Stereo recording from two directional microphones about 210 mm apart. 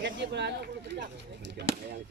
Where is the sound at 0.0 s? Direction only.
55° right (ahead or behind).